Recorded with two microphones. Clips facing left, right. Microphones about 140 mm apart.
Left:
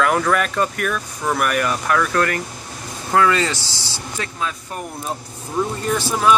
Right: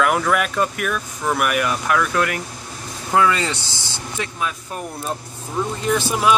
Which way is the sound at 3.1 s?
20° right (ahead or behind).